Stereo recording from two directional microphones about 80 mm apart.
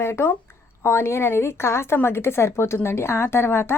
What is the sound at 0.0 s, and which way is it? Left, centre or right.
A woman's voice, left.